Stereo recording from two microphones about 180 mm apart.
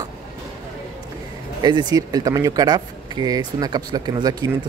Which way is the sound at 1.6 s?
25° right (ahead or behind).